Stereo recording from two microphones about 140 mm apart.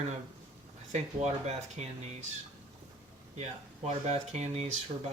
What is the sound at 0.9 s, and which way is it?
Speech, 50° right (ahead or behind).